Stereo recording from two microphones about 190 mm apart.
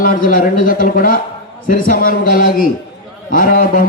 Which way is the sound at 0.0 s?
45° left (ahead or behind).